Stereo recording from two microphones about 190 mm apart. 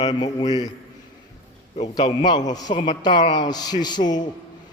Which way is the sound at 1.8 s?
20° left (ahead or behind).